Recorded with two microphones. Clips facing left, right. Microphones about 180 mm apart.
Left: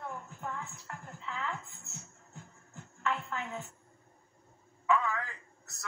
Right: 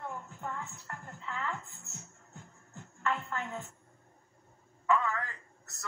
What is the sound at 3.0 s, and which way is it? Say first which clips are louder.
Speech: right 1 dB; 15° left (ahead or behind).